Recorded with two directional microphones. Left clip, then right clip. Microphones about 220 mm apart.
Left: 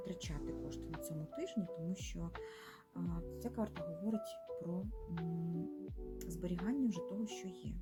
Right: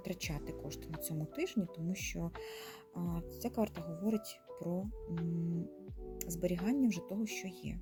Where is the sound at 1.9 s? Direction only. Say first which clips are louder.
Right 6 dB; 25° right (ahead or behind).